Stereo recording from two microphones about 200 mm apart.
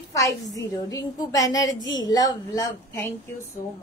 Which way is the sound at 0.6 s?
15° left (ahead or behind).